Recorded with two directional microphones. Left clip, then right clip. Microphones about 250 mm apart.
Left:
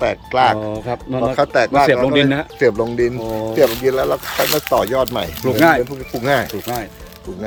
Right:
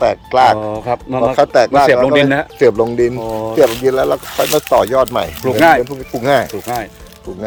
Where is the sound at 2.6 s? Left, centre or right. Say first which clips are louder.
Right 4 dB; right.